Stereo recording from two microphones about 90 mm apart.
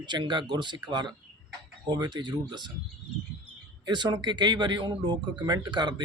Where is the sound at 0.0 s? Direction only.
55° right (ahead or behind).